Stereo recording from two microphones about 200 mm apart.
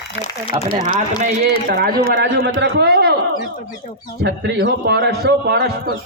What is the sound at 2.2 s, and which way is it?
Speech, 55° right (ahead or behind).